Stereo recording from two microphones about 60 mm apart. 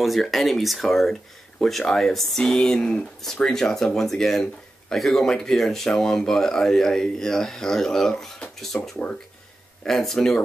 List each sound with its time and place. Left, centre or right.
0.0 s speech: centre
8.7 s speech: left
9.8 s speech: centre